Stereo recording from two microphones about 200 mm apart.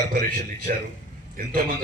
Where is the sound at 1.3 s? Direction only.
45° right (ahead or behind).